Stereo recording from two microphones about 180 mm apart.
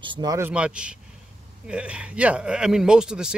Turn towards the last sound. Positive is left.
turn(degrees=-5)  # may be behind; listen again after turning